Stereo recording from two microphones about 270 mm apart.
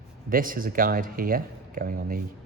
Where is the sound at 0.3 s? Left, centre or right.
Right.